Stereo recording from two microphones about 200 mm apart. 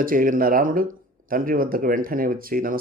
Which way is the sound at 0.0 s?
45° right (ahead or behind).